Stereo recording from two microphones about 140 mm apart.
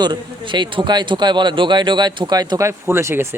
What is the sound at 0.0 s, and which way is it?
A man's voice, 35° right (ahead or behind).